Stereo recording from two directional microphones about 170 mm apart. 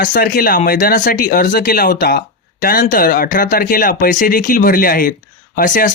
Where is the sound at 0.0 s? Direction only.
55° left (ahead or behind).